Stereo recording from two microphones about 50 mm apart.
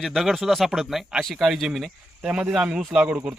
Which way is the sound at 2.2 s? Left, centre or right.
Right.